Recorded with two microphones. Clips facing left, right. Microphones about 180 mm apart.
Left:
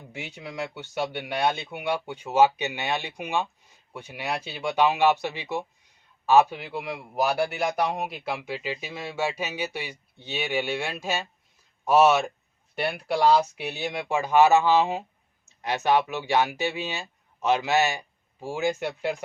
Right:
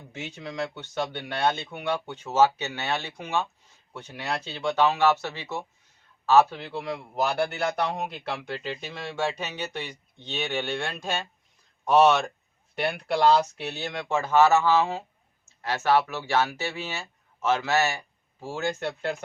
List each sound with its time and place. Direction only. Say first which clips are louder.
0.1 s speech: right 1 dB; 10° left (ahead or behind)